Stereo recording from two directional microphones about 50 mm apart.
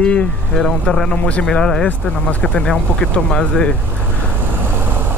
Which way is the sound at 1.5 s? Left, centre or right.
Centre.